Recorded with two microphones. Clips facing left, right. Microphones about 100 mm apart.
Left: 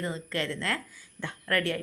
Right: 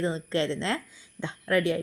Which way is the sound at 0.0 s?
30° right (ahead or behind).